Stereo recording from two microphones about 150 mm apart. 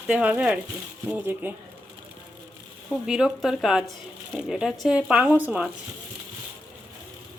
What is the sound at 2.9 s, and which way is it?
Speech, 5° right (ahead or behind).